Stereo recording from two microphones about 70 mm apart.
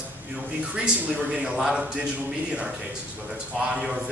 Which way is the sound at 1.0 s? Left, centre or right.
Centre.